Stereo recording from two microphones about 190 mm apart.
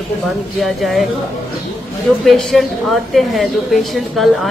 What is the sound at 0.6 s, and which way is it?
Speech, centre (ahead or behind).